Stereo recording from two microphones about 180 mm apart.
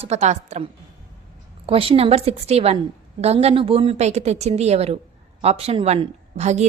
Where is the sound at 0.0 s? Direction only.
40° right (ahead or behind).